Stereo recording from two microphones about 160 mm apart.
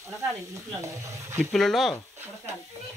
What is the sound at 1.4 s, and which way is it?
Speech, 5° left (ahead or behind).